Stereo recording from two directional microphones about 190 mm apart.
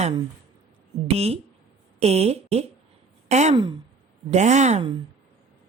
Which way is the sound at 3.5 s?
25° right (ahead or behind).